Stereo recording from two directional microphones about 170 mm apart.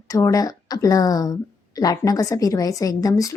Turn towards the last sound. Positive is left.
turn(degrees=20)  # may be behind; listen again after turning